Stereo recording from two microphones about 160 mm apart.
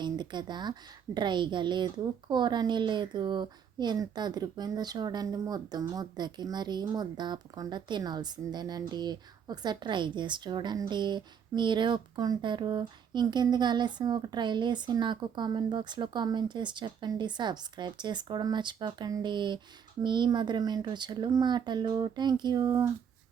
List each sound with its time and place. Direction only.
0.0 s speech: 30° right (ahead or behind)